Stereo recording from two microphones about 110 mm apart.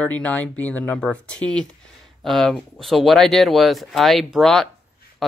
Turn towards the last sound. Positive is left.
turn(degrees=5)  # may be behind; listen again after turning